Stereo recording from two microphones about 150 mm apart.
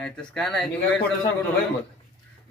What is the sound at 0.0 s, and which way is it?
Speech, 5° left (ahead or behind).